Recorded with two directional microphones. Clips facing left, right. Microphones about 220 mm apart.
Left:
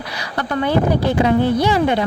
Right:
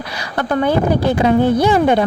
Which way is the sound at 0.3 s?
45° right (ahead or behind).